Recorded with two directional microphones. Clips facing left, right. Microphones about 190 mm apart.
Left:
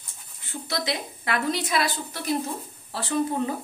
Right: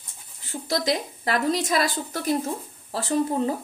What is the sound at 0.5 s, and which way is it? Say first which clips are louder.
A woman's voice: right 5 dB; 40° right (ahead or behind).